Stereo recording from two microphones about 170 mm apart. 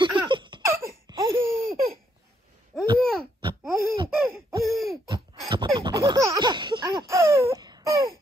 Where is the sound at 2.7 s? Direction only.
Centre (ahead or behind).